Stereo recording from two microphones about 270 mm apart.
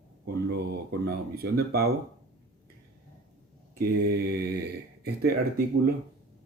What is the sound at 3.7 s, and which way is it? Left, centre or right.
Speech, right.